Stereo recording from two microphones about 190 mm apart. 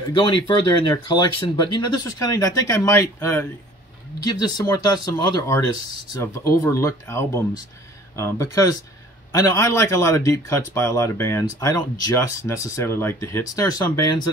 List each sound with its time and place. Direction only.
0.1 s speech: 25° left (ahead or behind)